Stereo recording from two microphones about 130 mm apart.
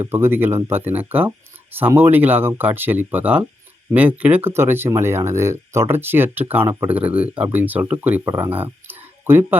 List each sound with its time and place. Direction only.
0.0 s speech: 20° right (ahead or behind)